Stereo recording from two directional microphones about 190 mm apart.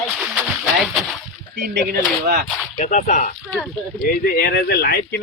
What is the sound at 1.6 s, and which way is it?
Speech, 55° right (ahead or behind).